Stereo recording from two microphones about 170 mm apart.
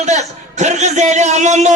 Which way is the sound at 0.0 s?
45° right (ahead or behind).